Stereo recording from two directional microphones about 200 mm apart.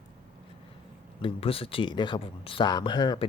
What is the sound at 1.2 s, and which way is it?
Speech, 30° left (ahead or behind).